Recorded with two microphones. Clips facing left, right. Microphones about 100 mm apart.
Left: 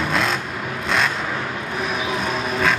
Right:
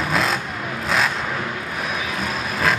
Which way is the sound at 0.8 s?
Centre (ahead or behind).